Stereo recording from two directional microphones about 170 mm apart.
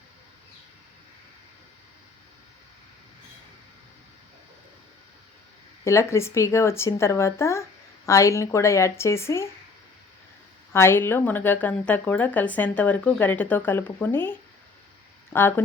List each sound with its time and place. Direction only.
5.8 s speech: 15° left (ahead or behind)
10.7 s speech: 15° left (ahead or behind)